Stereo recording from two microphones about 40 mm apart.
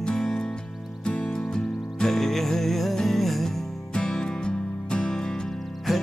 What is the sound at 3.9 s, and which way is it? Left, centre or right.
Music, centre.